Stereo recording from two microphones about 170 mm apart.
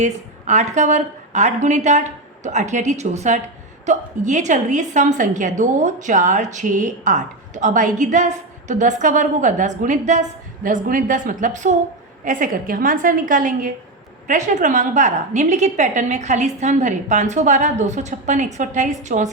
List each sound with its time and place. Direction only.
0.0 s a woman's voice: 45° right (ahead or behind)